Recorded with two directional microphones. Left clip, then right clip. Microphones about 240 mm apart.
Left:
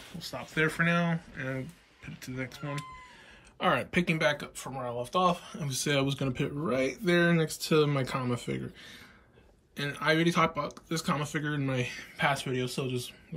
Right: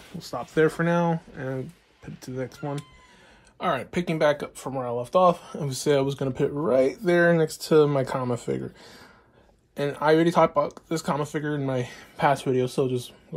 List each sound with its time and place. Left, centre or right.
0.2 s speech: centre
3.5 s speech: centre
9.8 s speech: centre